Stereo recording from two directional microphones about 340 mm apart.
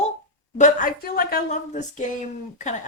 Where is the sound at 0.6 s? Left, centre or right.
Left.